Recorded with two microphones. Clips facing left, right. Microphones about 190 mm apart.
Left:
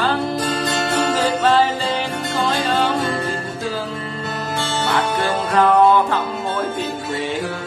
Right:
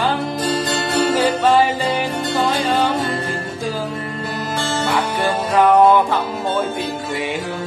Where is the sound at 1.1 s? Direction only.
10° right (ahead or behind).